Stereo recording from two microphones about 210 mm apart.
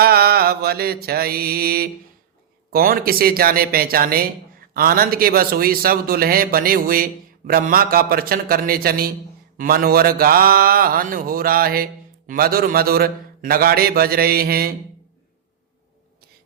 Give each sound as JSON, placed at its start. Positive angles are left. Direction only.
{"t": 0.0, "sound": "mantra", "side_deg": -45}
{"t": 2.7, "sound": "a man's voice", "side_deg": -45}